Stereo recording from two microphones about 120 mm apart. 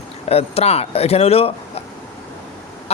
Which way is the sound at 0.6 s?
60° left (ahead or behind).